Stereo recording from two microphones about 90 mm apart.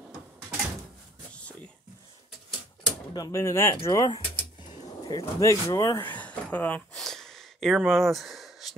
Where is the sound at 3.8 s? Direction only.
40° left (ahead or behind).